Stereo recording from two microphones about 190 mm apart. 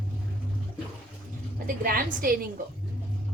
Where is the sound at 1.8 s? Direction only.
50° right (ahead or behind).